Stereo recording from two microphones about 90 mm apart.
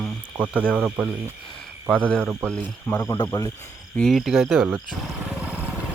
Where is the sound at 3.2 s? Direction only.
40° left (ahead or behind).